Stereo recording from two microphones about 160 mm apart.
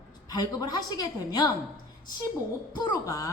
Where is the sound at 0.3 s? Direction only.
25° left (ahead or behind).